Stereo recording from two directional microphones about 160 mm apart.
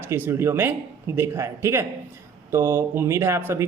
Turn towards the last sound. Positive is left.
turn(degrees=-15)  # may be behind; listen again after turning